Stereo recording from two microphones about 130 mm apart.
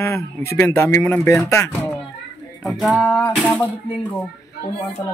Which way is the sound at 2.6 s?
Centre (ahead or behind).